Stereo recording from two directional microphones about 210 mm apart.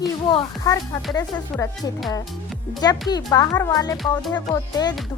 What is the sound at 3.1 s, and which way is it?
A child's voice, 20° left (ahead or behind).